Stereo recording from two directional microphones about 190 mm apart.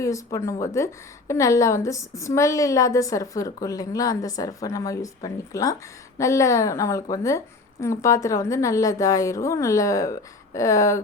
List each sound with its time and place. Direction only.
0.0 s speech: 15° left (ahead or behind)